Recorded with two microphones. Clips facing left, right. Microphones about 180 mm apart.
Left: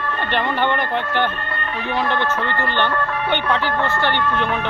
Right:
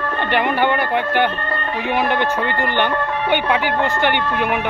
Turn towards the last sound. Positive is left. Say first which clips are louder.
# right 1 dB
turn(degrees=-15)  # may be behind; listen again after turning